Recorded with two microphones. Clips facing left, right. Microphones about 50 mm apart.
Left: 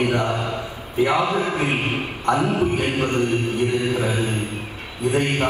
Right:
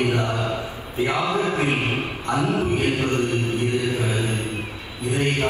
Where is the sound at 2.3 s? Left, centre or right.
Left.